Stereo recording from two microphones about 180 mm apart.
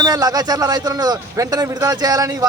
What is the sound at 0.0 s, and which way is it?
A man's voice, 20° right (ahead or behind).